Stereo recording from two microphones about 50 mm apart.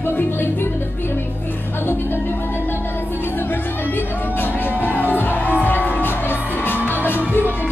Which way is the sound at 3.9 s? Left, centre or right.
Left.